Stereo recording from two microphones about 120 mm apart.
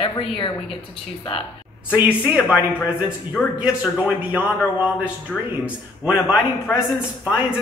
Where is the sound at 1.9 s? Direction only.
10° right (ahead or behind).